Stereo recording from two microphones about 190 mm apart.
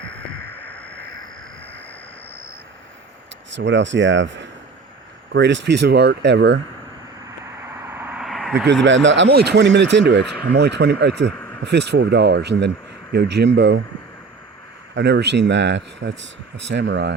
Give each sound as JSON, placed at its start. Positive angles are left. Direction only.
{"t": 3.6, "sound": "speech", "side_deg": -70}
{"t": 7.3, "sound": "vehicle", "side_deg": -15}
{"t": 8.5, "sound": "speech", "side_deg": -70}
{"t": 14.9, "sound": "speech", "side_deg": -65}